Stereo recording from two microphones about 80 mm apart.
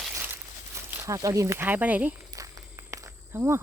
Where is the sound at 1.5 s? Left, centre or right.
Right.